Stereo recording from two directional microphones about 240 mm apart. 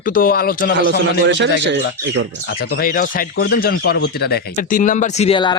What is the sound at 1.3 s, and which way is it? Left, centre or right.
Speech, right.